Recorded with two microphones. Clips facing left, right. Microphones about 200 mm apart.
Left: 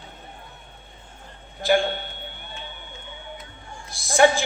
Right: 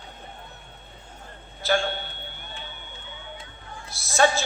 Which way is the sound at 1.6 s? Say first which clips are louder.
Left 4 dB; 15° left (ahead or behind).